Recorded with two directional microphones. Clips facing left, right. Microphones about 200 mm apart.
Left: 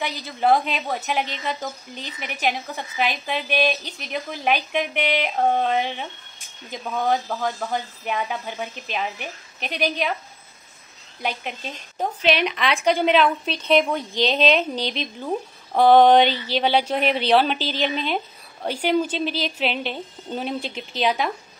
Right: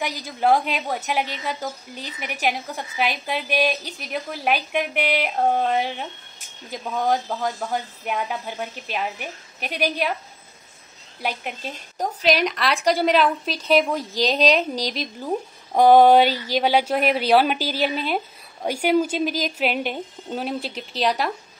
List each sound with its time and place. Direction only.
0.0 s a woman's voice: 10° right (ahead or behind)
11.1 s a woman's voice: 10° right (ahead or behind)
14.8 s a woman's voice: 40° right (ahead or behind)
15.1 s a woman's voice: 10° right (ahead or behind)